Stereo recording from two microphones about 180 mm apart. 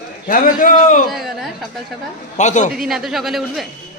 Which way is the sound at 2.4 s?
40° left (ahead or behind).